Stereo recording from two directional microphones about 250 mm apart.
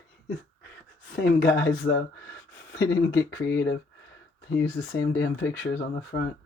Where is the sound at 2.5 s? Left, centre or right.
Left.